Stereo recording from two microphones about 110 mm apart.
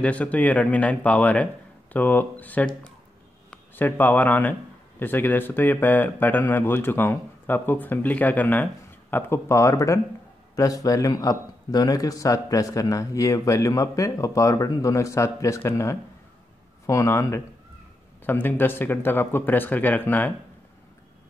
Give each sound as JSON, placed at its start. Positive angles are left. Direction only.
{"t": 0.0, "sound": "a man's voice", "side_deg": 10}